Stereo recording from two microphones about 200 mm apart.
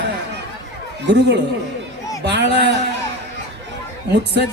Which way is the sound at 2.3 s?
60° right (ahead or behind).